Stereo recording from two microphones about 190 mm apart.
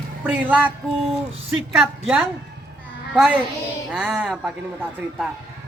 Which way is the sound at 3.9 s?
5° right (ahead or behind).